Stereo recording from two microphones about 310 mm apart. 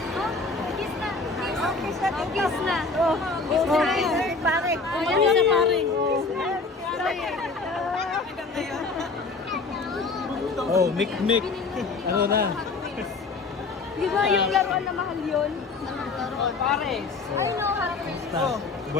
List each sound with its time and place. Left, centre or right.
0.1 s a sound: centre
0.8 s speech: centre
6.9 s speech: centre
8.0 s chatter: centre
10.7 s speech: centre
11.0 s speech: centre
12.1 s speech: right
14.1 s speech: centre
16.2 s speech: centre